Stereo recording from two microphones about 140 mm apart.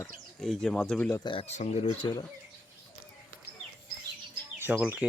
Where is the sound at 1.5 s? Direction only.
50° left (ahead or behind); by 2.2 s 35° left (ahead or behind).